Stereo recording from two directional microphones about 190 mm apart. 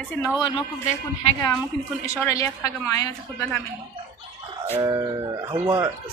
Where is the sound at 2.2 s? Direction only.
15° left (ahead or behind).